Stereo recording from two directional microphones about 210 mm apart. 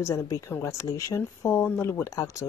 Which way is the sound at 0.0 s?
15° left (ahead or behind).